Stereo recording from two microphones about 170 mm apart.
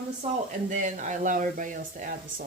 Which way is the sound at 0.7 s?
45° right (ahead or behind).